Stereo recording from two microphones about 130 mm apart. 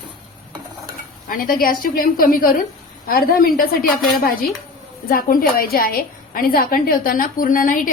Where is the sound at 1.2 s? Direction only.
90° left.